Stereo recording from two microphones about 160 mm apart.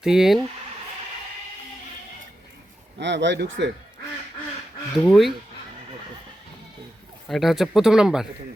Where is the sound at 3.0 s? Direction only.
90° right.